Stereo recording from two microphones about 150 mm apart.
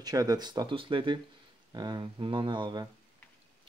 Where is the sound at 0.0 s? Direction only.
25° right (ahead or behind).